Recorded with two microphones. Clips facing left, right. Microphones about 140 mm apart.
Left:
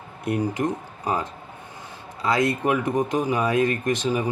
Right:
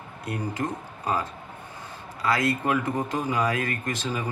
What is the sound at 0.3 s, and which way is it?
Speech, 20° left (ahead or behind).